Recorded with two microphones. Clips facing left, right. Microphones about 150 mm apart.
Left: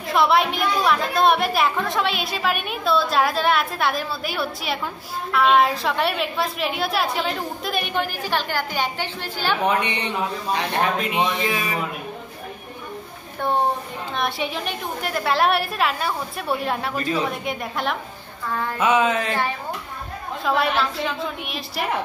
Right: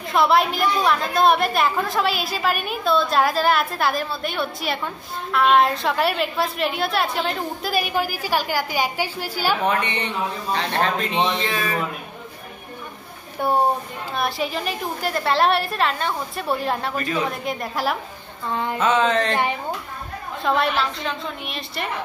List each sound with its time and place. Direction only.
0.1 s a woman's voice: centre (ahead or behind)
9.6 s speech: 15° left (ahead or behind)
14.1 s a woman's voice: centre (ahead or behind)
18.4 s a sound: 20° right (ahead or behind)
18.8 s speech: 10° left (ahead or behind)
20.4 s a woman's voice: centre (ahead or behind)